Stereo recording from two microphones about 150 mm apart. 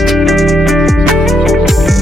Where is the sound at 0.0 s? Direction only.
Centre (ahead or behind).